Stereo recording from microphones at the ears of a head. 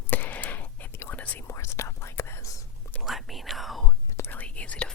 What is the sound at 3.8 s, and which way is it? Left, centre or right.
Whispering, left.